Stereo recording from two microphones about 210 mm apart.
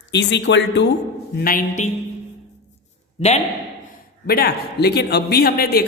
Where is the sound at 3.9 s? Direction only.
45° left (ahead or behind).